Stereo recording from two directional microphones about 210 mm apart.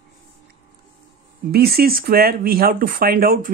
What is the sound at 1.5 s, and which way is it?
Speech, 45° right (ahead or behind).